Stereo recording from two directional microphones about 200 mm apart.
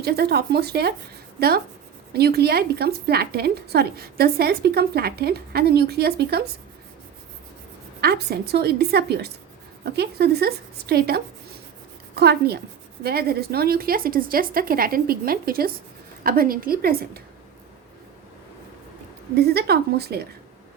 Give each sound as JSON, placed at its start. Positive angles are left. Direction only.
{"t": 0.0, "sound": "speech", "side_deg": -55}
{"t": 8.0, "sound": "speech", "side_deg": -55}
{"t": 19.4, "sound": "speech", "side_deg": -55}